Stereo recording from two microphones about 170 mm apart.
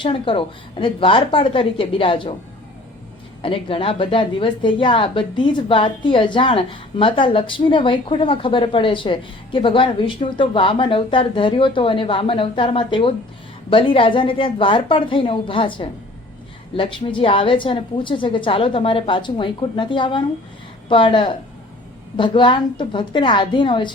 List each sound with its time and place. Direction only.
0.0 s a woman's voice: 30° left (ahead or behind)
3.4 s a woman's voice: 30° left (ahead or behind)